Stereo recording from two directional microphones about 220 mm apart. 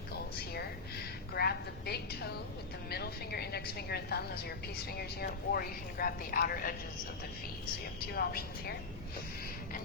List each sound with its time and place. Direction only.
1.3 s a sound: 45° left (ahead or behind)
2.9 s a woman's voice: 45° left (ahead or behind)
8.1 s a woman's voice: 45° left (ahead or behind)